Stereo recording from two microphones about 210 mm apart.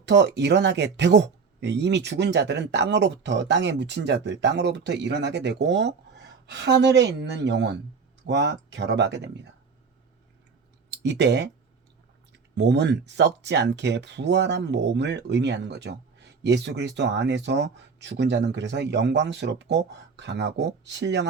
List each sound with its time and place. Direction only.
0.0 s speech: 55° right (ahead or behind)
10.9 s speech: 55° right (ahead or behind)